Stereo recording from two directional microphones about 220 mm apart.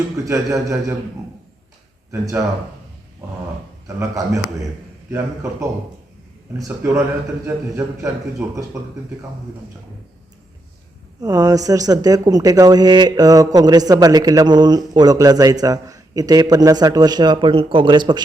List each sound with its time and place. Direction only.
0.3 s speech: 15° right (ahead or behind)
3.8 s speech: 15° right (ahead or behind)
11.2 s speech: 15° right (ahead or behind)